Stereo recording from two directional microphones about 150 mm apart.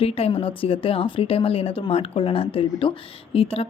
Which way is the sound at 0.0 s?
40° left (ahead or behind).